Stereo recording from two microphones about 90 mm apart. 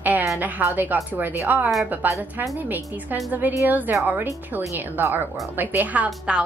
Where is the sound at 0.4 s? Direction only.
20° right (ahead or behind).